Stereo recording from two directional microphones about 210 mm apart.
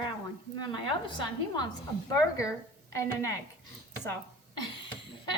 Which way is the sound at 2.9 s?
15° left (ahead or behind).